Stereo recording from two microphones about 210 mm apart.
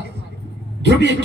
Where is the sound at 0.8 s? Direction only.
55° right (ahead or behind).